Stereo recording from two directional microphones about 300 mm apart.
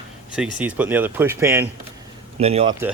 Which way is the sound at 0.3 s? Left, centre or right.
Centre.